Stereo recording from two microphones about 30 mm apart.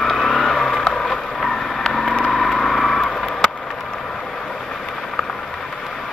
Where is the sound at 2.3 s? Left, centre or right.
Centre.